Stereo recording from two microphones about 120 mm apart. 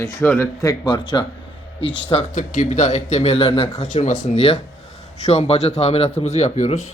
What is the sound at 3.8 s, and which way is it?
Speech, 90° left.